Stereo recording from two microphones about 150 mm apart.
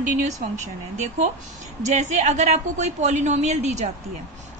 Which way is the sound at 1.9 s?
50° right (ahead or behind).